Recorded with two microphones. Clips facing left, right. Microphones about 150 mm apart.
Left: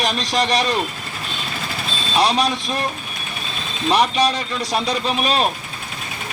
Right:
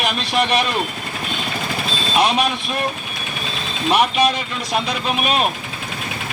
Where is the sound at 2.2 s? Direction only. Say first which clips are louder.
Even; 35° left (ahead or behind).